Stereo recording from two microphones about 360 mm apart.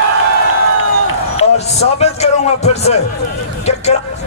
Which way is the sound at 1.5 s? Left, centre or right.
Centre.